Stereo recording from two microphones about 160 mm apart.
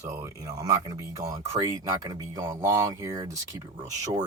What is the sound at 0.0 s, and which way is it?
Speech, 20° right (ahead or behind).